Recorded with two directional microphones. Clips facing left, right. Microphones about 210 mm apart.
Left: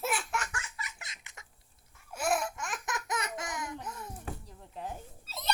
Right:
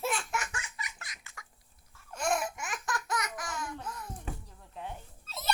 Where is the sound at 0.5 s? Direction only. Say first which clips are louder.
Even; 15° right (ahead or behind).